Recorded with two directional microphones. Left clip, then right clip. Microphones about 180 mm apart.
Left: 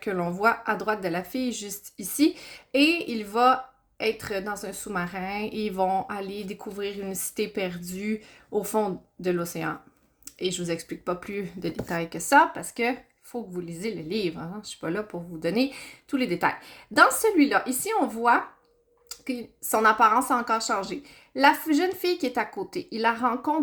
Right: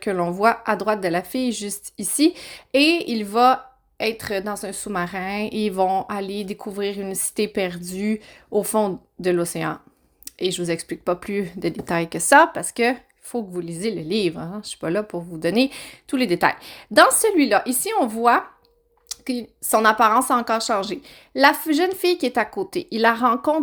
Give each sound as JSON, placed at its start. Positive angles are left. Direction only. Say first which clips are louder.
{"t": 0.0, "sound": "speech", "louder": "right 5 dB", "side_deg": -30}